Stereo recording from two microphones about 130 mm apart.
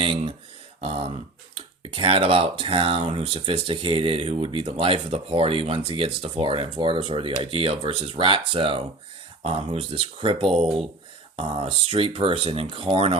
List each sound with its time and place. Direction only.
0.0 s speech: 40° right (ahead or behind)